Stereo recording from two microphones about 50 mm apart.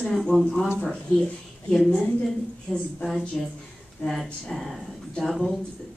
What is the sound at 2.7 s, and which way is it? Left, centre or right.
A woman's voice, centre.